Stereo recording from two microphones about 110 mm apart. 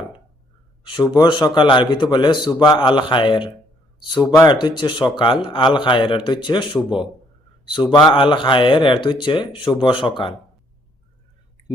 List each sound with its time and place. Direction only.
0.9 s speech: 40° left (ahead or behind)
4.1 s speech: 35° left (ahead or behind)
4.4 s speech: 45° left (ahead or behind)
6.7 s speech: 5° right (ahead or behind)
7.7 s speech: 45° left (ahead or behind)